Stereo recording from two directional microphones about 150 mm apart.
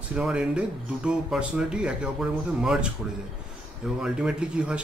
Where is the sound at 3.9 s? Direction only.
5° right (ahead or behind).